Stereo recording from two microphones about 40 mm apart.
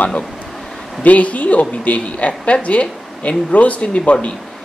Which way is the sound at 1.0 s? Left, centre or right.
Left.